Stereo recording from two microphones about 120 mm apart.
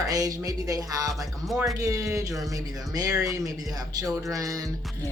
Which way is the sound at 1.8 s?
25° right (ahead or behind).